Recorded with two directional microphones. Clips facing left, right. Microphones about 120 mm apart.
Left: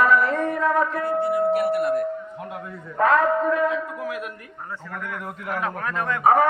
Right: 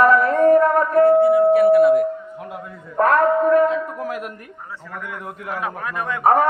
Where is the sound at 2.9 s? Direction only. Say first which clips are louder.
Right 3 dB; 55° right (ahead or behind).